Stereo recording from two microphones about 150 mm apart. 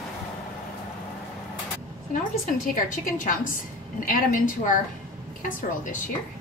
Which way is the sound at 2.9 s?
60° left (ahead or behind).